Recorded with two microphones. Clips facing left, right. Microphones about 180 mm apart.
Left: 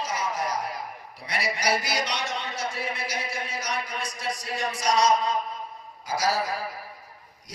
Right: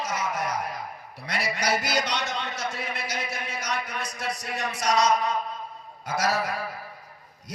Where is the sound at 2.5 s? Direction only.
30° left (ahead or behind).